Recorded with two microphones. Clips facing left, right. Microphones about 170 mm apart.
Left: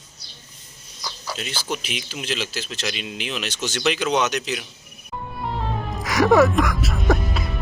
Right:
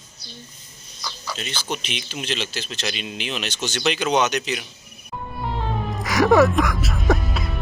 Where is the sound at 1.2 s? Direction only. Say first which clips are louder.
Left 1 dB; 10° left (ahead or behind).